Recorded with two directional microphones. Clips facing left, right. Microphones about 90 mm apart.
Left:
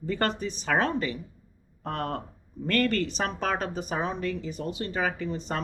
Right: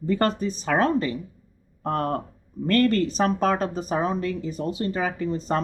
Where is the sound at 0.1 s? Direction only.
40° right (ahead or behind).